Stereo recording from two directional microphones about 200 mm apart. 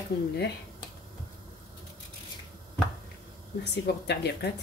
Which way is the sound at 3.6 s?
55° left (ahead or behind).